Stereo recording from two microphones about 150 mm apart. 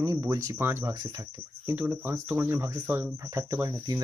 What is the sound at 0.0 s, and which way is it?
Speech, 20° right (ahead or behind).